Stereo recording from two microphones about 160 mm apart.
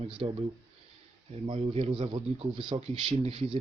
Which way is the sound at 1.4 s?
35° right (ahead or behind).